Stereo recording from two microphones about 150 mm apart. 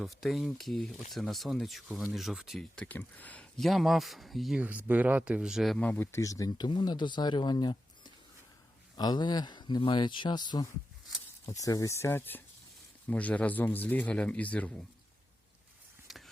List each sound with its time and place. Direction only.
0.0 s speech: centre (ahead or behind)
4.9 s a man's voice: 10° right (ahead or behind)
5.8 s a man's voice: 15° left (ahead or behind)
16.0 s a sound: centre (ahead or behind)